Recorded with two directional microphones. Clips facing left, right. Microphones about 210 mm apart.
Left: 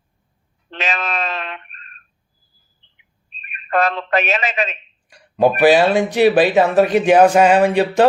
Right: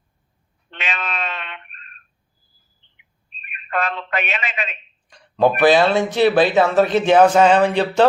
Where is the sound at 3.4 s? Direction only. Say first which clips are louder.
Left 6 dB; 40° left (ahead or behind).